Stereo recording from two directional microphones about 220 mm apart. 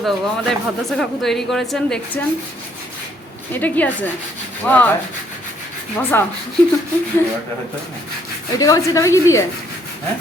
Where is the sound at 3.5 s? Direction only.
10° left (ahead or behind).